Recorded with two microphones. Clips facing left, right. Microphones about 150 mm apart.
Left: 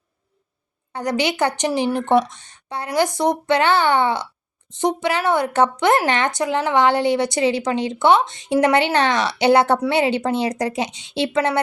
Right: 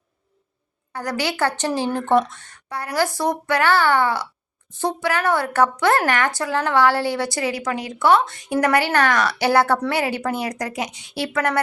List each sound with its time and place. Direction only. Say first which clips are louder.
0.9 s a woman's voice: left 3 dB; 20° left (ahead or behind)